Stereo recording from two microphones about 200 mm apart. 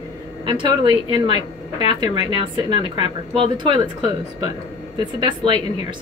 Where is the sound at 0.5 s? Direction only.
25° right (ahead or behind).